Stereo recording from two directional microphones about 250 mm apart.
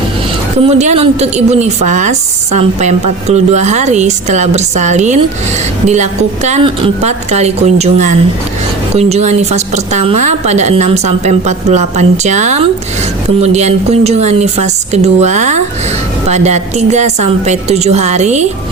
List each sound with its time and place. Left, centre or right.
0.6 s a woman's voice: right